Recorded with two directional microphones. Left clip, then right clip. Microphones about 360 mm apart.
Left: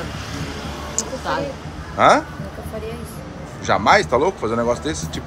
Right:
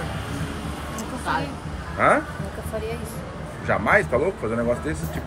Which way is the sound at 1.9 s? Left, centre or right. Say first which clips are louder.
Left 5 dB; centre.